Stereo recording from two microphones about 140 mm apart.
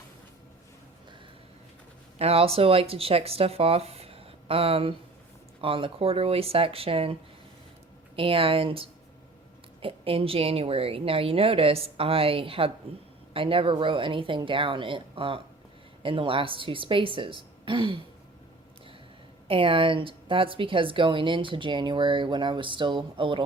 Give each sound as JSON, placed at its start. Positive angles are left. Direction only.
{"t": 2.1, "sound": "a woman's voice", "side_deg": -45}
{"t": 19.5, "sound": "a woman's voice", "side_deg": -40}